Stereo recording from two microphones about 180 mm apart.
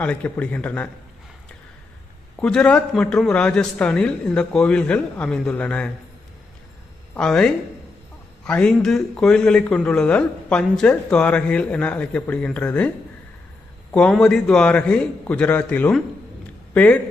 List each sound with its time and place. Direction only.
0.0 s speech: 5° left (ahead or behind)
2.4 s speech: 5° left (ahead or behind)
7.1 s speech: 5° left (ahead or behind)
13.9 s speech: 5° left (ahead or behind)